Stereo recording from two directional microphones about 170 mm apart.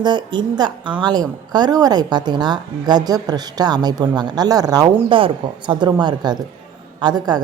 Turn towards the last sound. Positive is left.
turn(degrees=-25)  # may be behind; listen again after turning